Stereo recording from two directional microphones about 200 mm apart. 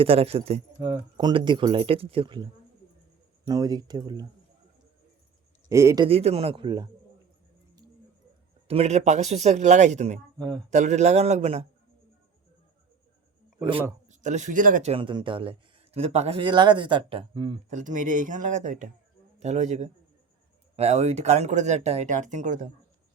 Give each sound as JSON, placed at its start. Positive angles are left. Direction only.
{"t": 0.0, "sound": "speech", "side_deg": -30}
{"t": 5.6, "sound": "speech", "side_deg": -15}
{"t": 6.1, "sound": "speech", "side_deg": -30}
{"t": 8.6, "sound": "speech", "side_deg": -30}
{"t": 10.3, "sound": "speech", "side_deg": -20}
{"t": 10.7, "sound": "speech", "side_deg": -35}
{"t": 14.1, "sound": "speech", "side_deg": -35}